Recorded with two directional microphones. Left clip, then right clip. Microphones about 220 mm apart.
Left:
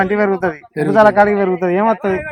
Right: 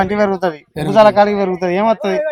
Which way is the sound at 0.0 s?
5° right (ahead or behind).